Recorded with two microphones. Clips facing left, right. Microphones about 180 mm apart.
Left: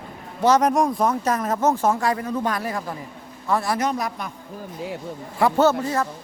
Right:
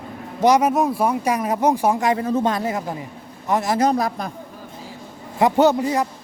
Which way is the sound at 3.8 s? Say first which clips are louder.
Right 5 dB; 35° right (ahead or behind).